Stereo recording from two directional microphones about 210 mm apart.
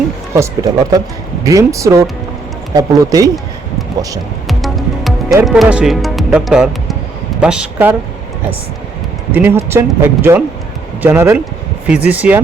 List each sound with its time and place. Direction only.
0.3 s speech: 15° right (ahead or behind)
4.4 s music: centre (ahead or behind)
5.5 s speech: 5° right (ahead or behind)
9.3 s speech: 10° right (ahead or behind)